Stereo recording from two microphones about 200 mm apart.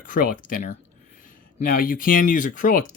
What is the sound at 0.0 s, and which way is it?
Speech, 45° left (ahead or behind).